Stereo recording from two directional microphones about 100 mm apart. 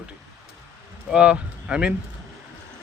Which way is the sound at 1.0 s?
10° right (ahead or behind).